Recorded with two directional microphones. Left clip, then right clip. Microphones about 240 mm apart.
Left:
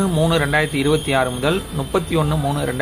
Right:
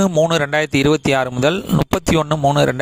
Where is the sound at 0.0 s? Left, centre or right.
Right.